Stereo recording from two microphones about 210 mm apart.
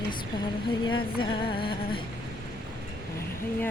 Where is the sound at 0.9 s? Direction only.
25° left (ahead or behind).